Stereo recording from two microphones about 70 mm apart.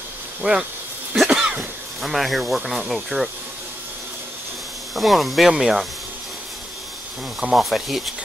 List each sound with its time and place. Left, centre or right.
0.4 s speech: centre
1.1 s cough: centre
2.0 s speech: centre
4.9 s speech: centre
7.5 s speech: centre